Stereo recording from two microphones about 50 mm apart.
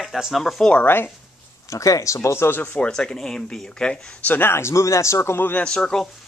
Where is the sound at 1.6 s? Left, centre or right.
Left.